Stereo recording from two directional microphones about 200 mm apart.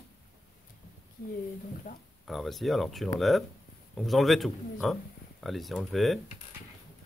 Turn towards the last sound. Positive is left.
turn(degrees=0)  # may be behind; listen again after turning